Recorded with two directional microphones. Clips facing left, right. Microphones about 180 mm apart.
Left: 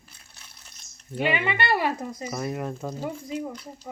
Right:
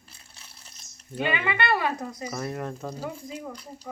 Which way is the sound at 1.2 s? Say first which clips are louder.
Left 2 dB; 15° left (ahead or behind).